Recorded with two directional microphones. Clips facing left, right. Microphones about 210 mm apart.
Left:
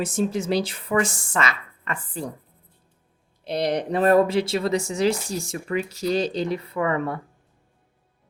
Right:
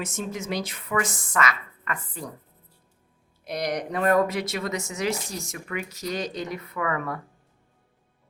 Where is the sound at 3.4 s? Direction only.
30° left (ahead or behind).